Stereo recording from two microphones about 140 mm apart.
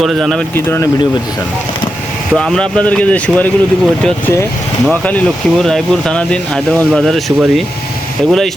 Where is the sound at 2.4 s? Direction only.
5° left (ahead or behind).